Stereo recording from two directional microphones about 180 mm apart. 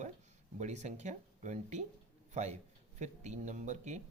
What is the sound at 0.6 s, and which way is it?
Speech, 40° right (ahead or behind).